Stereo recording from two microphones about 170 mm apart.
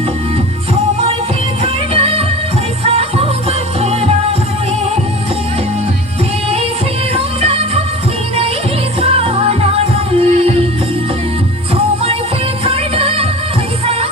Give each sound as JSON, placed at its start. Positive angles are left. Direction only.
{"t": 1.6, "sound": "music", "side_deg": -35}
{"t": 7.1, "sound": "music", "side_deg": -35}
{"t": 9.0, "sound": "music", "side_deg": -35}
{"t": 12.6, "sound": "music", "side_deg": -35}